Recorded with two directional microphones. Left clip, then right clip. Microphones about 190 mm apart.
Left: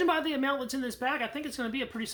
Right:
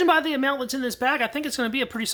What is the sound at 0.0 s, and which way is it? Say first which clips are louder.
Speech: right 7 dB; 25° right (ahead or behind).